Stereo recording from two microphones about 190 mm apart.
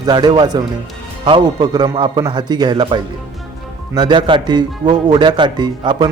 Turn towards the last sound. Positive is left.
turn(degrees=-25)  # may be behind; listen again after turning